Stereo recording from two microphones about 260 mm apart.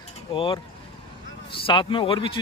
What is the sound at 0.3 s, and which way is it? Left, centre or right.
A man's voice, centre.